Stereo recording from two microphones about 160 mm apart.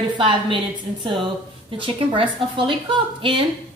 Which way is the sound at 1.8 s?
35° right (ahead or behind).